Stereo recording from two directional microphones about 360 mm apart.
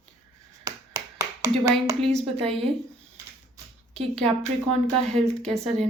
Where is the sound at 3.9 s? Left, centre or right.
Centre.